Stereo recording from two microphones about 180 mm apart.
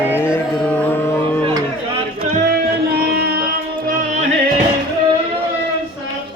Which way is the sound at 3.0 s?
65° right (ahead or behind).